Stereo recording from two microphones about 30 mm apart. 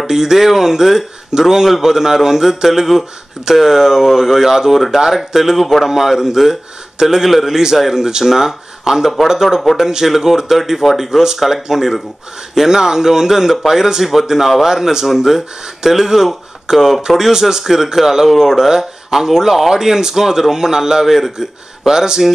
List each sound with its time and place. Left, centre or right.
0.0 s a man's voice: centre
17.2 s a man's voice: centre